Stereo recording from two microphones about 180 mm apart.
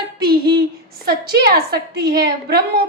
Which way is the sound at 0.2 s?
60° right (ahead or behind).